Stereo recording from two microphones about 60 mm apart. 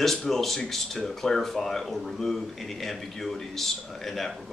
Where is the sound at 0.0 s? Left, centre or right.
Centre.